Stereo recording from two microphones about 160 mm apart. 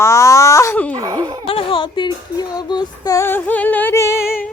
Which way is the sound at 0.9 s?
20° right (ahead or behind).